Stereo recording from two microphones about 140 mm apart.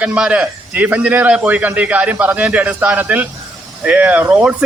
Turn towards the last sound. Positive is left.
turn(degrees=-10)  # may be behind; listen again after turning